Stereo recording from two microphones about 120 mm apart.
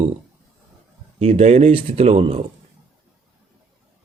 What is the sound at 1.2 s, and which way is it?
A man's voice, 60° right (ahead or behind).